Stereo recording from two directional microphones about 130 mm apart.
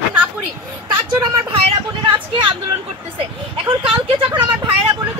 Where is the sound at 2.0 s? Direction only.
40° right (ahead or behind).